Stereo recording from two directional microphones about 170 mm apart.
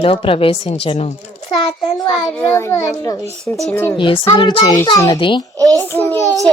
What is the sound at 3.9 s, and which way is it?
Speech, 30° left (ahead or behind).